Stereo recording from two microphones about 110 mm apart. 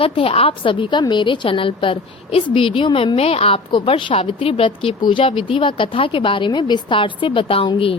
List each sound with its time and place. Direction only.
0.0 s a woman's voice: 60° left (ahead or behind)